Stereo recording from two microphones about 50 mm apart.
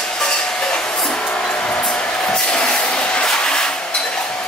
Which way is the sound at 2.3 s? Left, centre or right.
Centre.